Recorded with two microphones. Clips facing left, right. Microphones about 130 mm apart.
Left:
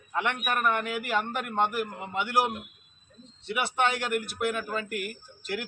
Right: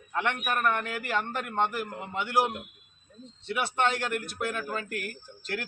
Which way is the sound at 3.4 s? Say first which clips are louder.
Even; 15° left (ahead or behind).